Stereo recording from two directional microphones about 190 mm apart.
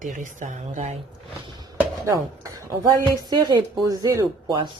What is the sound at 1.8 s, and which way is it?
Speech, 15° right (ahead or behind).